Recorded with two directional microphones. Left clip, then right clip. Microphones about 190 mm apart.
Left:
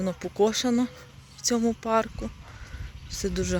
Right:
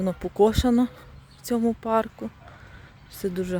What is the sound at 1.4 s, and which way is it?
Speech, 20° right (ahead or behind).